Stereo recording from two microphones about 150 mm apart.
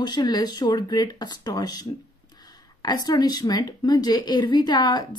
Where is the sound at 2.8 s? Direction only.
25° left (ahead or behind).